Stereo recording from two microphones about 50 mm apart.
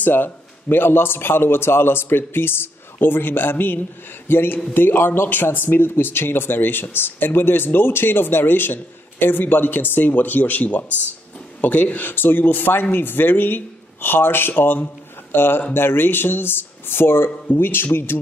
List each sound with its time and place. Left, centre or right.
0.0 s speech: left